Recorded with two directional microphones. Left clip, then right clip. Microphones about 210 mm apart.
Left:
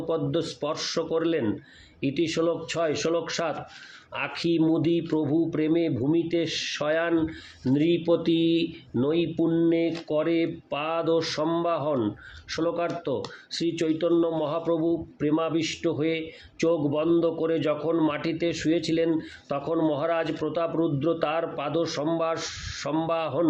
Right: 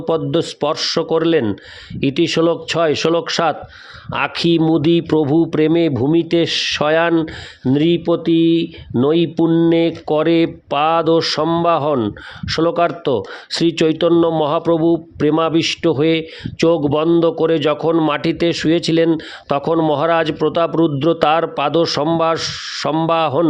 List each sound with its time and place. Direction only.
0.0 s speech: 50° right (ahead or behind)